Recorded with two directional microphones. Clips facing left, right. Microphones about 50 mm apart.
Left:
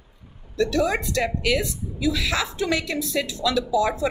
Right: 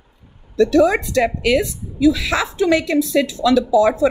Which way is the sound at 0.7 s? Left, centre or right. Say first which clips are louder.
Right 9 dB; right.